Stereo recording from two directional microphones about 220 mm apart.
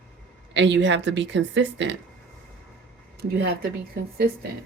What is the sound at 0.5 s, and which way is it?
A woman's voice, 55° right (ahead or behind).